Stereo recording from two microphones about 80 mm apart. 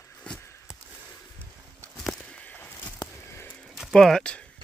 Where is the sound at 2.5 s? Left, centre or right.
Centre.